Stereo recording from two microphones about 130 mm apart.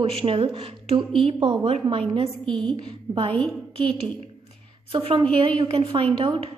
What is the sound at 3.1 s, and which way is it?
Speech, 45° right (ahead or behind).